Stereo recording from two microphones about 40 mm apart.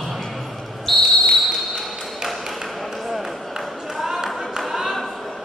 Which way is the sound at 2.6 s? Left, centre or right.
Centre.